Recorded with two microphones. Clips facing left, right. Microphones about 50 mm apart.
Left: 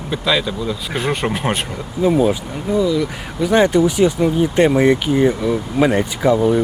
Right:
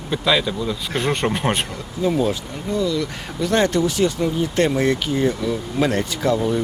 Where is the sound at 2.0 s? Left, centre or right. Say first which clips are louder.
Left 5 dB; centre.